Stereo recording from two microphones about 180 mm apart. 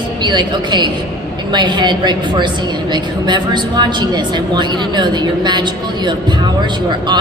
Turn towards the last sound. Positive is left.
turn(degrees=-25)  # may be behind; listen again after turning